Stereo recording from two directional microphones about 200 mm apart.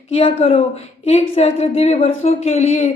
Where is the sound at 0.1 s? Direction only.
30° left (ahead or behind).